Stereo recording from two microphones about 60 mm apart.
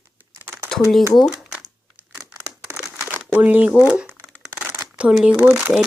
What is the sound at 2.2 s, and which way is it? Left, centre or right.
Crumpling, right.